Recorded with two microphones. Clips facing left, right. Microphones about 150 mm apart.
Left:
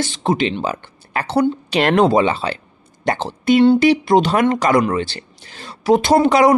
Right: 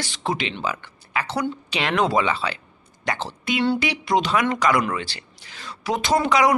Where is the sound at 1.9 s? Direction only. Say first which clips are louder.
Left 5 dB; 30° left (ahead or behind).